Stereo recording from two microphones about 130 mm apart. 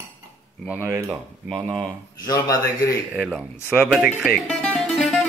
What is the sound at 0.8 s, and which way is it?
Speech, 25° right (ahead or behind).